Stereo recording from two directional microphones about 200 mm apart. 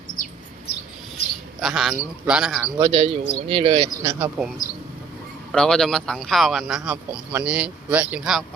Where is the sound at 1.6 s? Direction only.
Centre (ahead or behind).